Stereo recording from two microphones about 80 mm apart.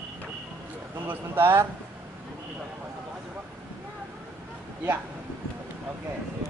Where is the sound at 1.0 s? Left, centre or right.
Right.